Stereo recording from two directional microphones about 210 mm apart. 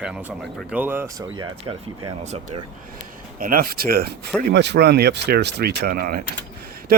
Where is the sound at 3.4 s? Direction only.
45° right (ahead or behind).